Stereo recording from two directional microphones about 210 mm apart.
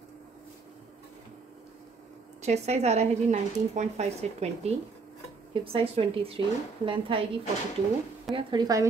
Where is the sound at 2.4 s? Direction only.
30° right (ahead or behind).